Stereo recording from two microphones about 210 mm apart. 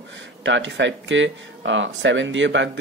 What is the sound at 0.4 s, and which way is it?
Speech, 60° right (ahead or behind).